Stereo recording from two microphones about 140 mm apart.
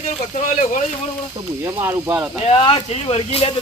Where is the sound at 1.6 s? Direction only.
15° right (ahead or behind).